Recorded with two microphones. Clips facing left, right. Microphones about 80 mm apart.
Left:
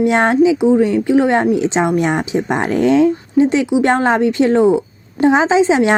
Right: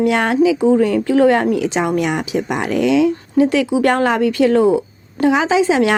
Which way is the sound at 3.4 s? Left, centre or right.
Left.